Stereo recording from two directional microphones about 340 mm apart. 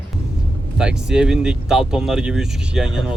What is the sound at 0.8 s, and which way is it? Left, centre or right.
Speech, centre.